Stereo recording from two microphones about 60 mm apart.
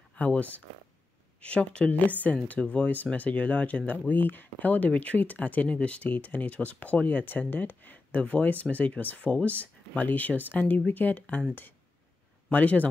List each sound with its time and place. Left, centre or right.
0.1 s speech: left
12.4 s speech: left